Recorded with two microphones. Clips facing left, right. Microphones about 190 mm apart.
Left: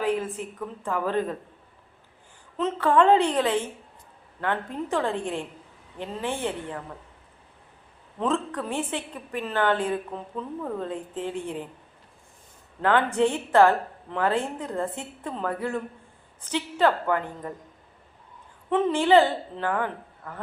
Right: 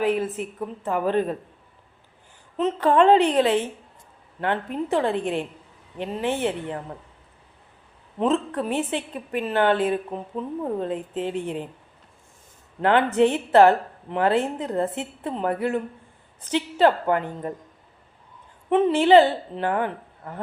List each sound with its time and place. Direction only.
0.9 s a woman's voice: 20° right (ahead or behind)
2.6 s a woman's voice: 20° right (ahead or behind)
8.2 s a woman's voice: 20° right (ahead or behind)
12.8 s a woman's voice: 20° right (ahead or behind)
18.7 s a woman's voice: 20° right (ahead or behind)